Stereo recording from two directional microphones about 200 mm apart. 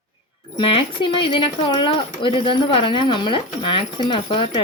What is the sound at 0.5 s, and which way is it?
Speech, 25° left (ahead or behind).